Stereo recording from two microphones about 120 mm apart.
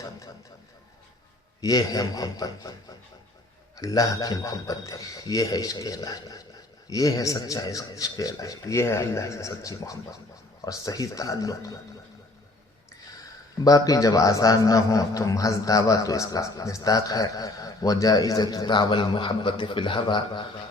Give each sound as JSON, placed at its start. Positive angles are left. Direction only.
{"t": 1.6, "sound": "a man's voice", "side_deg": 30}
{"t": 3.8, "sound": "a man's voice", "side_deg": 30}
{"t": 13.7, "sound": "a man's voice", "side_deg": 30}